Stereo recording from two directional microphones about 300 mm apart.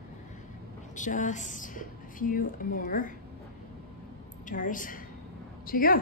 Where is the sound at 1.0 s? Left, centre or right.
Left.